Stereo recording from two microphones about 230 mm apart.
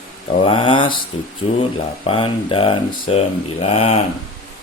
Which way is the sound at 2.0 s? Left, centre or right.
Left.